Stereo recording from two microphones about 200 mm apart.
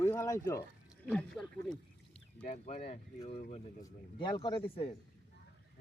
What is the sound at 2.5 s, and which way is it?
A man's voice, 30° left (ahead or behind).